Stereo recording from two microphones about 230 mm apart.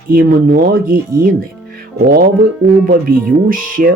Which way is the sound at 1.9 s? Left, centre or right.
Right.